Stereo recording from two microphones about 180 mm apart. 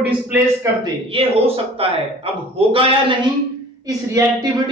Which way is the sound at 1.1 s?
30° right (ahead or behind).